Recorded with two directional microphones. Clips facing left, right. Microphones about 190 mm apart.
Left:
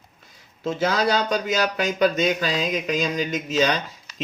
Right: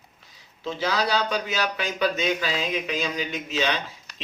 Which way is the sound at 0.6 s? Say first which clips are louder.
Left 4 dB; 45° left (ahead or behind).